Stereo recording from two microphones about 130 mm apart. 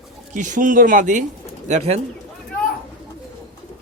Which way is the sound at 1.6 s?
60° right (ahead or behind).